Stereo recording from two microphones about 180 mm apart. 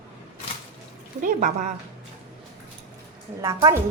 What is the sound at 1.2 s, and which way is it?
Speech, 45° right (ahead or behind).